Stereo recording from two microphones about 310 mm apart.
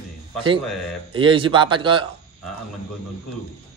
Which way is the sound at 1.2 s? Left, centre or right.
Centre.